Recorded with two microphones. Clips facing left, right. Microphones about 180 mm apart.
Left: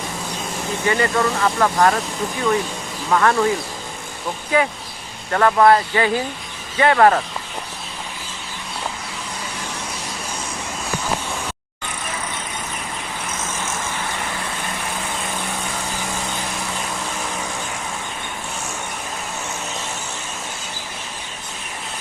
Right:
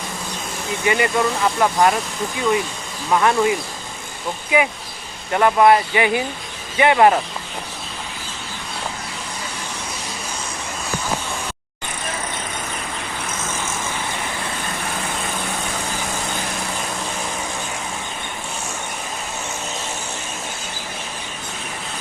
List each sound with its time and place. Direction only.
0.9 s speech: 15° right (ahead or behind)
3.1 s speech: 15° right (ahead or behind)
4.5 s speech: 15° right (ahead or behind)